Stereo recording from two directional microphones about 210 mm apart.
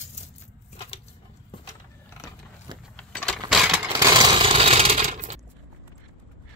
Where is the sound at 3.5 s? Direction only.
Centre (ahead or behind).